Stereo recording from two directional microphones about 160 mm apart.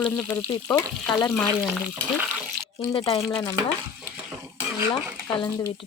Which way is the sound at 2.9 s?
35° left (ahead or behind).